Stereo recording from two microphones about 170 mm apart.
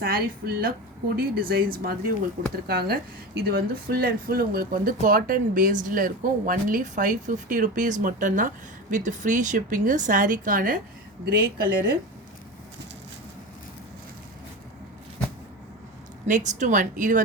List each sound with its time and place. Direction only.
0.0 s speech: 60° right (ahead or behind)
16.2 s speech: 45° right (ahead or behind)